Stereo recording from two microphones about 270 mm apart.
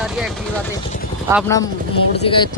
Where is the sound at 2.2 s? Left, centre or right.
Centre.